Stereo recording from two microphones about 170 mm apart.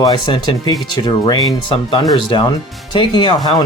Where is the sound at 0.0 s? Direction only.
25° left (ahead or behind).